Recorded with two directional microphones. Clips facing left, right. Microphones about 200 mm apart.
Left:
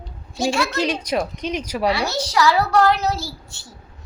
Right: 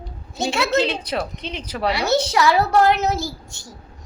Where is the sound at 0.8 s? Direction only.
15° left (ahead or behind).